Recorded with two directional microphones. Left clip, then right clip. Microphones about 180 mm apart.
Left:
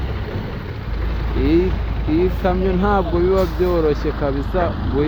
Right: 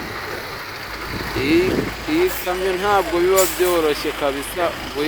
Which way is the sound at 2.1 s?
15° right (ahead or behind).